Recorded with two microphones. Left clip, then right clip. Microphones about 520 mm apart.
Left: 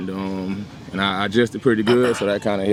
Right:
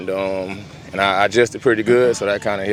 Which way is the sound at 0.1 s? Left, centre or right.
Right.